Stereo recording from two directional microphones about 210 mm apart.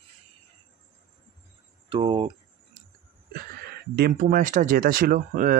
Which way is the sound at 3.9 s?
45° right (ahead or behind).